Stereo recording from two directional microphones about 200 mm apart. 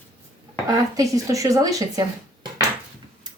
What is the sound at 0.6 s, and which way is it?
Speech, 15° right (ahead or behind).